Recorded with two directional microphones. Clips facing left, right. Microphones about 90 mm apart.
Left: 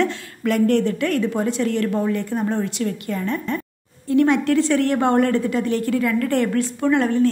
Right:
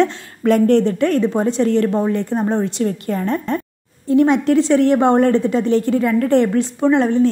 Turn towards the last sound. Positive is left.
turn(degrees=-20)  # may be behind; listen again after turning